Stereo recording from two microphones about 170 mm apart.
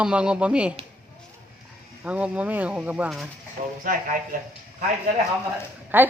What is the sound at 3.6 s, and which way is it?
Speech, 55° right (ahead or behind).